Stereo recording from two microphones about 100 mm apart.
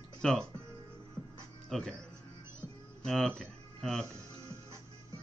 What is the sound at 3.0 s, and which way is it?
Speech, 5° left (ahead or behind).